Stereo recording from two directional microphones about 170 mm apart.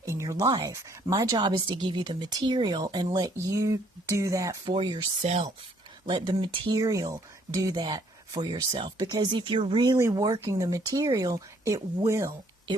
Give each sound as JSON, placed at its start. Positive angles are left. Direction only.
{"t": 0.0, "sound": "speech", "side_deg": -15}